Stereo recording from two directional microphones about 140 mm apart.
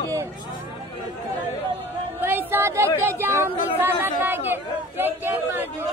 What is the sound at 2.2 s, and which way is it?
A man's voice, 15° right (ahead or behind).